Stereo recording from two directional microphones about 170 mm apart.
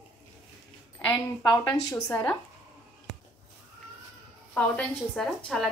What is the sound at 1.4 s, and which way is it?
Speech, 20° left (ahead or behind).